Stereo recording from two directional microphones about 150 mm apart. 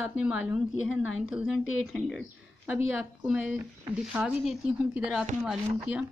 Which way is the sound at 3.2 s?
10° right (ahead or behind).